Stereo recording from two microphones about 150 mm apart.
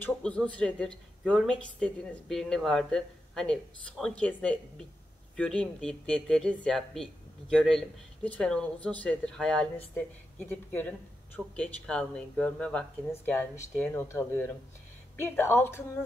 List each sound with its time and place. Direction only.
0.0 s speech: 5° left (ahead or behind)